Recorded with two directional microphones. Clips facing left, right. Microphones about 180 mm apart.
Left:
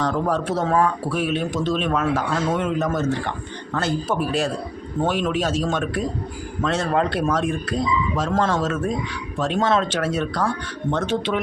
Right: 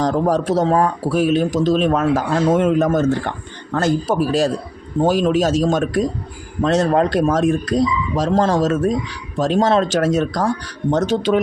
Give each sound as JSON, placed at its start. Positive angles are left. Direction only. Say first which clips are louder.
{"t": 0.0, "sound": "speech", "louder": "right 5 dB", "side_deg": -40}